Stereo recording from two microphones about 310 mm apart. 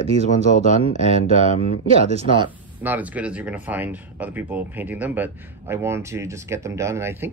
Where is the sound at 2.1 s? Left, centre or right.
Centre.